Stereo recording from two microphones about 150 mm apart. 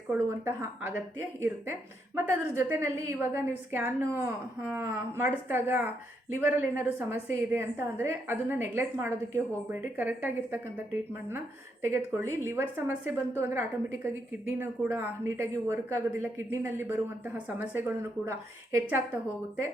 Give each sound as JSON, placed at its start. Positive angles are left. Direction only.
{"t": 0.1, "sound": "a woman's voice", "side_deg": -15}